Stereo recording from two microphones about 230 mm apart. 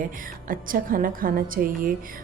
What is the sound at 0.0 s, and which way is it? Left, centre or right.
Speech, right.